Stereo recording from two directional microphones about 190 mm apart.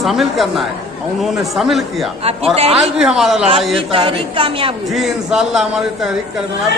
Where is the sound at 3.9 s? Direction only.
30° right (ahead or behind).